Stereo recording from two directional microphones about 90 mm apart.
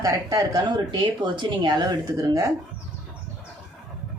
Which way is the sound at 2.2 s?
40° right (ahead or behind).